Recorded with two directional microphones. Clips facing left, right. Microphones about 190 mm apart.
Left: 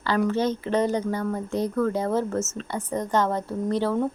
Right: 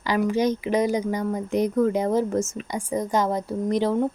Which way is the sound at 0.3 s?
10° right (ahead or behind).